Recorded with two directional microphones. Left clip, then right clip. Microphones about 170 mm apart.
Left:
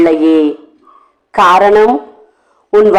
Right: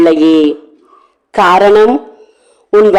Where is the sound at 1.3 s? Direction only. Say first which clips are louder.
Even; 20° right (ahead or behind).